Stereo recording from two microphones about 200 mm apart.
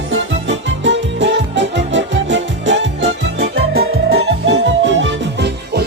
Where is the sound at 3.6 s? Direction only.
50° right (ahead or behind).